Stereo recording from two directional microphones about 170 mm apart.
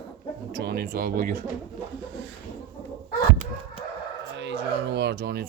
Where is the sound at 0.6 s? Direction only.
70° right (ahead or behind).